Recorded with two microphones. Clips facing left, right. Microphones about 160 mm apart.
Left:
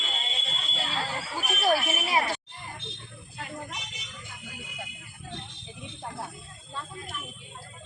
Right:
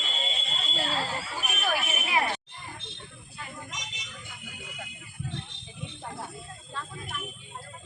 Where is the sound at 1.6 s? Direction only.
35° left (ahead or behind).